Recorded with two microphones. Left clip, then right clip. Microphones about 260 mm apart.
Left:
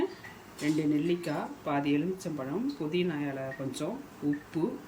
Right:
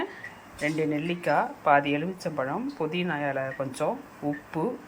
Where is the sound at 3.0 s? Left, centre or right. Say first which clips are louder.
Right 5 dB; right.